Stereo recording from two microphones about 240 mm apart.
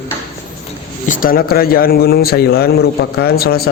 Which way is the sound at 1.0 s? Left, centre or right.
Left.